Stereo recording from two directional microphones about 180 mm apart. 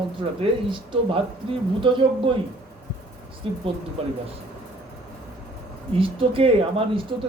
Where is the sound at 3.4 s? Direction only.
30° right (ahead or behind).